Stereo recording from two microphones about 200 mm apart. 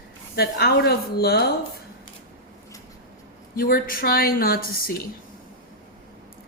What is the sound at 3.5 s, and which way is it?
A woman's voice, 45° left (ahead or behind).